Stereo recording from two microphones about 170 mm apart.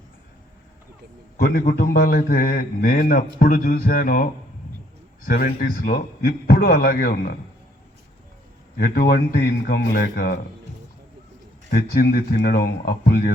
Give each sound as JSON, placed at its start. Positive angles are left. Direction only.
{"t": 1.4, "sound": "a man's voice", "side_deg": 60}
{"t": 5.3, "sound": "a man's voice", "side_deg": 60}
{"t": 8.8, "sound": "a man's voice", "side_deg": 60}
{"t": 11.7, "sound": "a man's voice", "side_deg": 60}